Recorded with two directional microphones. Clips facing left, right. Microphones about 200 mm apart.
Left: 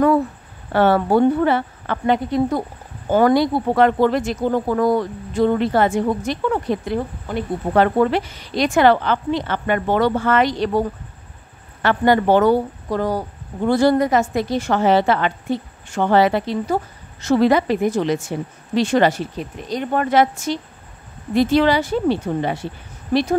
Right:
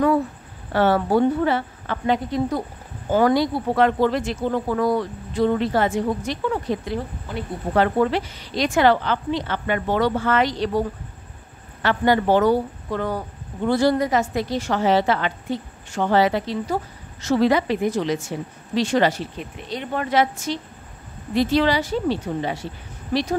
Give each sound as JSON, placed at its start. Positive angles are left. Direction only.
{"t": 0.7, "sound": "a woman's voice", "side_deg": 55}
{"t": 11.8, "sound": "speech", "side_deg": 50}
{"t": 12.9, "sound": "speech", "side_deg": 35}
{"t": 13.7, "sound": "a woman's voice", "side_deg": 50}